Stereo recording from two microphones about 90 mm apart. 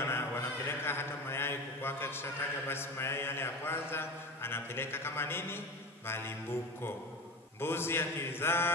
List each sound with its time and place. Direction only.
0.0 s a sound: 25° left (ahead or behind)
2.7 s a man's voice: 25° left (ahead or behind)
7.6 s a man's voice: 25° left (ahead or behind)